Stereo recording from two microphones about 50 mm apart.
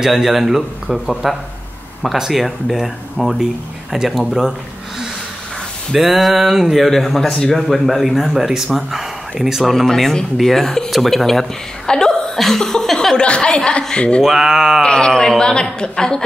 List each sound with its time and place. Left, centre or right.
0.0 s speech: centre
5.9 s speech: centre
7.6 s speech: centre
9.8 s a man's voice: centre
13.2 s a woman's voice: centre
14.2 s speech: centre
14.8 s a man's voice: centre